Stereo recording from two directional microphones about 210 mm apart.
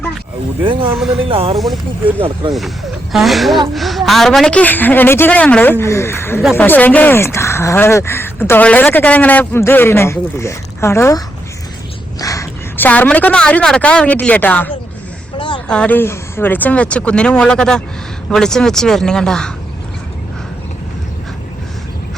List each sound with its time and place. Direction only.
0.6 s speech: 25° right (ahead or behind)
1.5 s speech: centre (ahead or behind)
12.2 s a woman's voice: 15° left (ahead or behind)
15.4 s a sound: 20° left (ahead or behind)
15.6 s speech: 5° left (ahead or behind)